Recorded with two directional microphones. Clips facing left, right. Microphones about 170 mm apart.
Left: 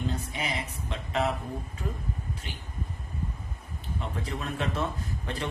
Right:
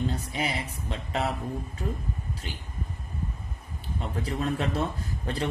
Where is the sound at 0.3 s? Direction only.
35° right (ahead or behind).